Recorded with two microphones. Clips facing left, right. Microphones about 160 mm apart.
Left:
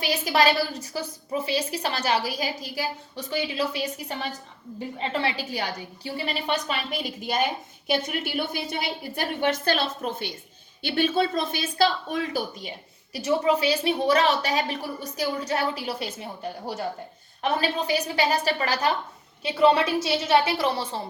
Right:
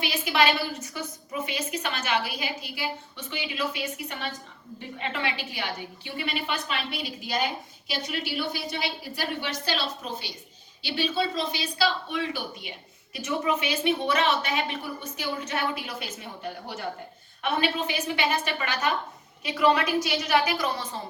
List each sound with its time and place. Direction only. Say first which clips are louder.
0.0 s a woman's voice: left 2 dB; 40° left (ahead or behind)